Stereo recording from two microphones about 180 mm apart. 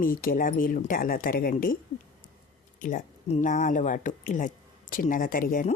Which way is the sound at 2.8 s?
40° left (ahead or behind).